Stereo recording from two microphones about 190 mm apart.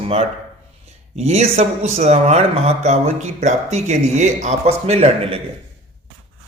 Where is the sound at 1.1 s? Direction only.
35° right (ahead or behind).